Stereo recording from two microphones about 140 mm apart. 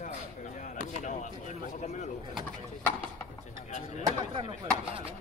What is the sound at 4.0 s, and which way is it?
Speech, 40° right (ahead or behind).